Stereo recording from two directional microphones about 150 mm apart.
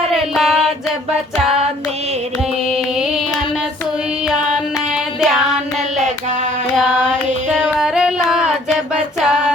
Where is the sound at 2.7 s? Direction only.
5° right (ahead or behind).